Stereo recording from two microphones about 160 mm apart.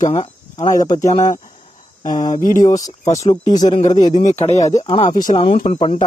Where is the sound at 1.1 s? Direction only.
45° left (ahead or behind).